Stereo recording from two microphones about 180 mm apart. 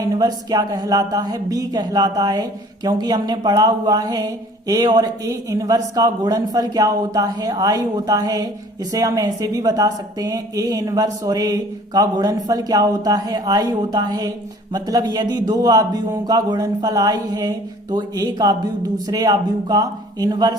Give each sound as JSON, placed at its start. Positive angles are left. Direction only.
{"t": 0.0, "sound": "a woman's voice", "side_deg": -20}